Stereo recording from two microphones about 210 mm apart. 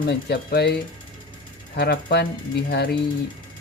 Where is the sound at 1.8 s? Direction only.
50° left (ahead or behind).